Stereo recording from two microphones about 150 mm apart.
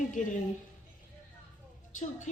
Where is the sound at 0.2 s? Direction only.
55° left (ahead or behind).